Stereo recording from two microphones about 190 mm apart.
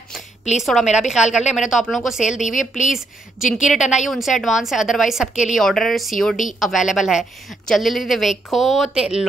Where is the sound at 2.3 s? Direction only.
40° left (ahead or behind).